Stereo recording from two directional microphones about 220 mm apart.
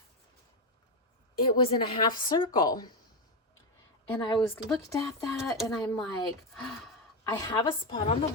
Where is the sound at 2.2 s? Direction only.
20° left (ahead or behind).